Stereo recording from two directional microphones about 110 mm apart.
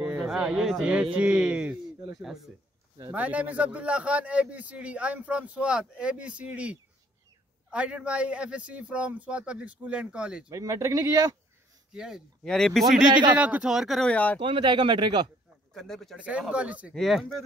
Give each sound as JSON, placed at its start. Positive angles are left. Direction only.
{"t": 0.0, "sound": "a man's voice", "side_deg": -5}
{"t": 3.1, "sound": "a man's voice", "side_deg": -15}
{"t": 10.5, "sound": "speech", "side_deg": -30}
{"t": 11.9, "sound": "speech", "side_deg": -5}
{"t": 13.3, "sound": "speech", "side_deg": -10}
{"t": 14.1, "sound": "speech", "side_deg": 15}
{"t": 14.4, "sound": "speech", "side_deg": -45}
{"t": 15.7, "sound": "speech", "side_deg": 5}
{"t": 16.2, "sound": "a man's voice", "side_deg": -10}
{"t": 16.9, "sound": "speech", "side_deg": 0}